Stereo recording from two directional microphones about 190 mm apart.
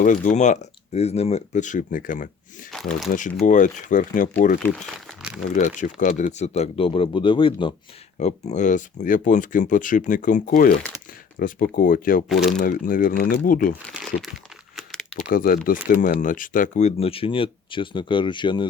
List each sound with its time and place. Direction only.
0.0 s speech: 40° left (ahead or behind)
3.4 s speech: 40° left (ahead or behind)
4.9 s crumpling: 5° right (ahead or behind)
5.5 s speech: 40° left (ahead or behind)
8.2 s speech: 40° left (ahead or behind)
12.3 s speech: centre (ahead or behind)
12.5 s speech: 45° left (ahead or behind)
13.9 s speech: centre (ahead or behind)
15.2 s speech: 45° left (ahead or behind); by 18.7 s 25° left (ahead or behind)